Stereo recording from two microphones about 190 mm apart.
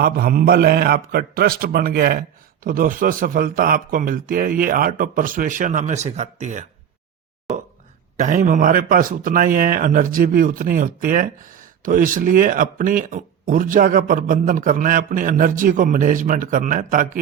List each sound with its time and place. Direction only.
0.0 s speech: 50° right (ahead or behind)
8.1 s speech: 45° right (ahead or behind)